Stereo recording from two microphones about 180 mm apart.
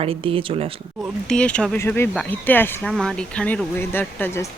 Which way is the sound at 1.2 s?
5° left (ahead or behind).